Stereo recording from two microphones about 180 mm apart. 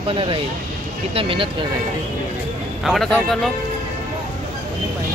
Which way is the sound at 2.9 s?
Centre (ahead or behind).